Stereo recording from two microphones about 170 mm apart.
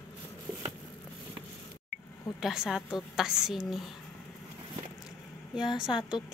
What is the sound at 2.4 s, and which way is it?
A woman's voice, centre (ahead or behind).